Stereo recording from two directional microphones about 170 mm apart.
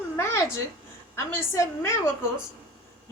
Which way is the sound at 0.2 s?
15° left (ahead or behind).